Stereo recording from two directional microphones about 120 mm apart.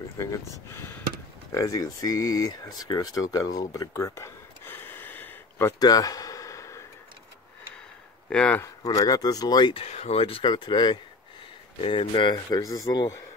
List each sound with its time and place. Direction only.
0.2 s speech: 25° left (ahead or behind)
5.8 s a sound: 30° left (ahead or behind)
8.3 s speech: 10° left (ahead or behind)
8.8 s speech: 30° left (ahead or behind)
9.8 s speech: 60° left (ahead or behind)
10.5 s speech: 40° left (ahead or behind)